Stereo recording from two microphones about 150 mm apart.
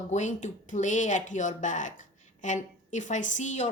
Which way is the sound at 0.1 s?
55° left (ahead or behind).